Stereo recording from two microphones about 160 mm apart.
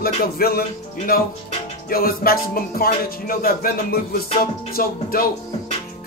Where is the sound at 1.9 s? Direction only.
65° left (ahead or behind).